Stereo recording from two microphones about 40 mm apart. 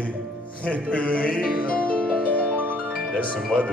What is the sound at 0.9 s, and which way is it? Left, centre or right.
Music, left.